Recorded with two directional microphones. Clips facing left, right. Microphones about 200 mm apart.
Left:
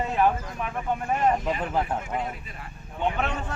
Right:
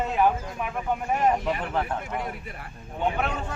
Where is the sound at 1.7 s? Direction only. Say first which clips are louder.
Left 1 dB; 10° left (ahead or behind).